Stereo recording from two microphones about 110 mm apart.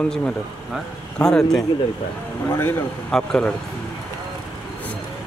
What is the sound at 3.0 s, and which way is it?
Speech, 5° left (ahead or behind).